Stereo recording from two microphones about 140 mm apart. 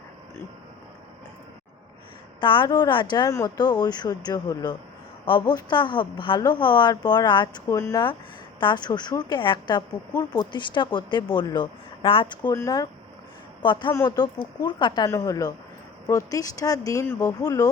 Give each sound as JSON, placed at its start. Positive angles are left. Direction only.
{"t": 2.4, "sound": "a woman's voice", "side_deg": 35}
{"t": 13.9, "sound": "speech", "side_deg": 20}
{"t": 14.3, "sound": "speech", "side_deg": 35}